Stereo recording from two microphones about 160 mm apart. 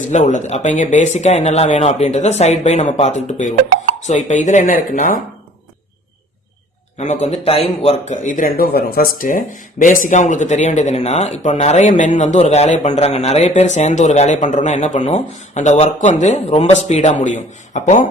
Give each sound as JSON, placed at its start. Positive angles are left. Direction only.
{"t": 0.1, "sound": "a man's voice", "side_deg": 50}
{"t": 7.0, "sound": "a man's voice", "side_deg": 45}